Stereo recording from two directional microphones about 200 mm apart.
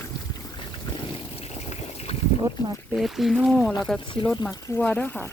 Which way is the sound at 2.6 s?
20° left (ahead or behind).